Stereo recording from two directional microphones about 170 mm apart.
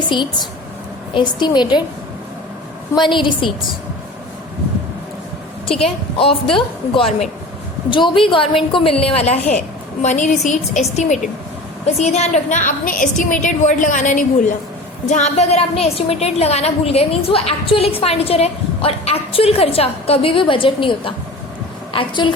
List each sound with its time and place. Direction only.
1.1 s a woman's voice: 25° left (ahead or behind)
2.9 s a woman's voice: 30° left (ahead or behind)
5.8 s a woman's voice: 35° left (ahead or behind)